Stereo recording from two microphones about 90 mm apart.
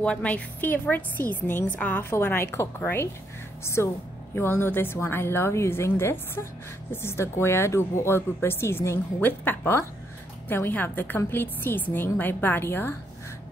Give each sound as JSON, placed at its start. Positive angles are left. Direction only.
{"t": 0.0, "sound": "speech", "side_deg": 15}